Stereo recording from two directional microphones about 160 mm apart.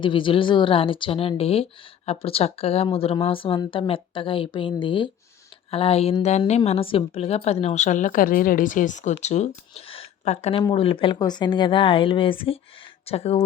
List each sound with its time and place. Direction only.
0.0 s a woman's voice: 30° left (ahead or behind)
9.7 s a sound: 35° left (ahead or behind)
10.5 s speech: 30° left (ahead or behind)